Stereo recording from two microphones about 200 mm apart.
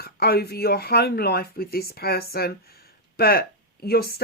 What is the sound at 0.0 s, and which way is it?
Speech, 50° left (ahead or behind).